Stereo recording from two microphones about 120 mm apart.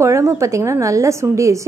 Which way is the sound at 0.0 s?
25° right (ahead or behind).